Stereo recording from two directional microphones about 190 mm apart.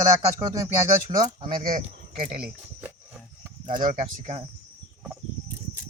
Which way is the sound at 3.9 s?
40° right (ahead or behind).